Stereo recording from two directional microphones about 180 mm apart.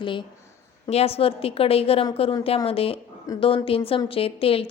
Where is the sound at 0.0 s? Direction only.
25° left (ahead or behind).